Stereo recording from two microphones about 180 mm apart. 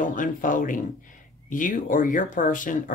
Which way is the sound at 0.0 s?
45° left (ahead or behind).